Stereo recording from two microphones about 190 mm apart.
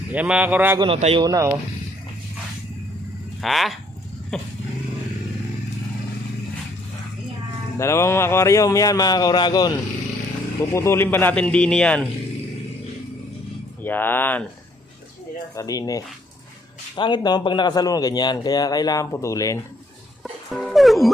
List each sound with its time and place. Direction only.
0.1 s speech: 5° right (ahead or behind)
0.8 s speech: 30° right (ahead or behind)
3.4 s a sound: centre (ahead or behind)
7.8 s speech: 15° left (ahead or behind)
13.8 s speech: 10° left (ahead or behind)
15.5 s a man's voice: 20° left (ahead or behind)
20.5 s speech: centre (ahead or behind)